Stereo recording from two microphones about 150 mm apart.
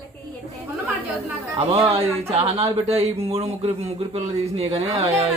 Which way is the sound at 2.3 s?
40° right (ahead or behind).